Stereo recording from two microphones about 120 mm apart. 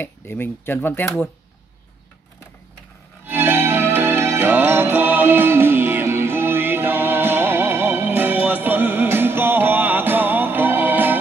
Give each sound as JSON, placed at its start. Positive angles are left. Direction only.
{"t": 0.0, "sound": "speech", "side_deg": 20}
{"t": 3.3, "sound": "music", "side_deg": -20}